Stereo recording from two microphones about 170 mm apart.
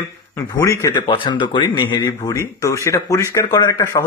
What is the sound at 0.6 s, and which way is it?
Speech, 20° left (ahead or behind).